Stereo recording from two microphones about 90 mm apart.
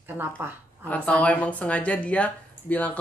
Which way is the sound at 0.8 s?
15° left (ahead or behind).